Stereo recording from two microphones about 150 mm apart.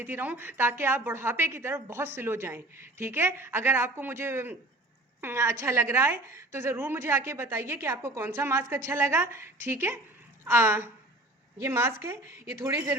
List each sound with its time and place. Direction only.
0.0 s a woman's voice: 15° right (ahead or behind)